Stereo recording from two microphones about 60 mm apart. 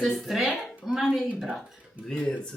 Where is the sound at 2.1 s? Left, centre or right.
Centre.